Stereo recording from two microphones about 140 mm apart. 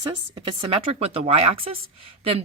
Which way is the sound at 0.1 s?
35° right (ahead or behind).